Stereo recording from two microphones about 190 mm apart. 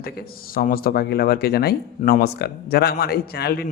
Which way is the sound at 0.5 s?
50° left (ahead or behind).